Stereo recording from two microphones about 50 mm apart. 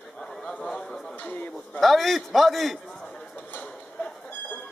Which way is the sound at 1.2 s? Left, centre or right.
Left.